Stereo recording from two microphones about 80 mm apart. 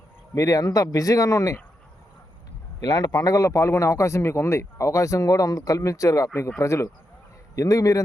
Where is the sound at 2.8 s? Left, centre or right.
Left.